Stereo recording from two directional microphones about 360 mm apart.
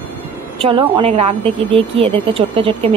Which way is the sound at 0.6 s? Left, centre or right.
Centre.